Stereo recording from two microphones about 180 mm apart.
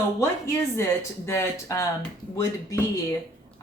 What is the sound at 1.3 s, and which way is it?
Speech, 15° left (ahead or behind).